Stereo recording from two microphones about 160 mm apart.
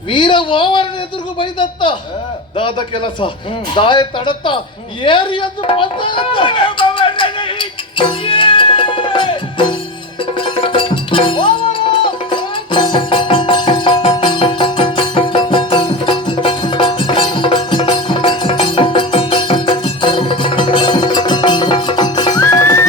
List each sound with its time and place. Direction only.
0.1 s speech: 30° left (ahead or behind)
5.0 s a sound: 30° left (ahead or behind)
10.3 s music: 30° left (ahead or behind)